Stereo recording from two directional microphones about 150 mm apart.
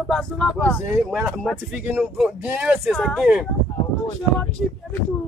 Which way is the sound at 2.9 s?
5° left (ahead or behind).